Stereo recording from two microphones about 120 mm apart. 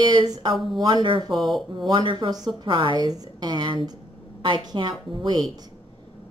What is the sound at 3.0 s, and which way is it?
A woman's voice, 35° right (ahead or behind).